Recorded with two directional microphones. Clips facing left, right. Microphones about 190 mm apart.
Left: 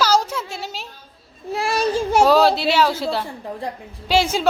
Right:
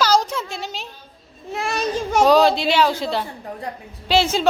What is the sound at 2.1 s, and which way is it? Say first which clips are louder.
A woman's voice: right 1 dB; 5° left (ahead or behind).